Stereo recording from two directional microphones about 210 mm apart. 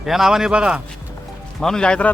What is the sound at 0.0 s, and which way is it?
Speech, centre (ahead or behind).